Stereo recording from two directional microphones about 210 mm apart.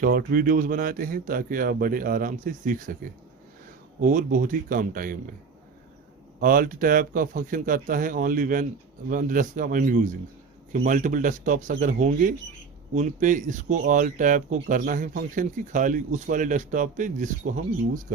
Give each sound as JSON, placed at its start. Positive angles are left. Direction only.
{"t": 0.0, "sound": "speech", "side_deg": -45}
{"t": 4.0, "sound": "speech", "side_deg": -40}
{"t": 6.4, "sound": "speech", "side_deg": -40}